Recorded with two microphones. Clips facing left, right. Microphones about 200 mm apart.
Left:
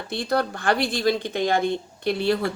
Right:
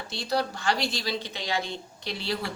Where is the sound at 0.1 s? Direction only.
55° left (ahead or behind).